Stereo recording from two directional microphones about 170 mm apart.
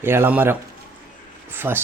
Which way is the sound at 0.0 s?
15° right (ahead or behind).